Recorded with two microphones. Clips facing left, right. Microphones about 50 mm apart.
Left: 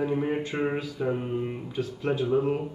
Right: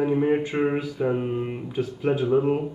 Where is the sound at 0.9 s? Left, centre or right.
Centre.